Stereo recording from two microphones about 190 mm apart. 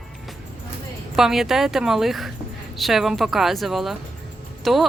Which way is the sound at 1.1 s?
Centre (ahead or behind).